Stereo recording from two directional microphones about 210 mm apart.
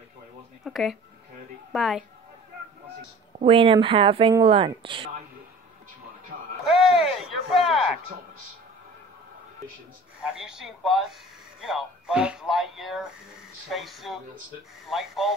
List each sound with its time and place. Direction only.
0.7 s speech: centre (ahead or behind)
3.3 s speech: 25° right (ahead or behind)
6.6 s a sound: centre (ahead or behind)
10.2 s speech: 5° right (ahead or behind)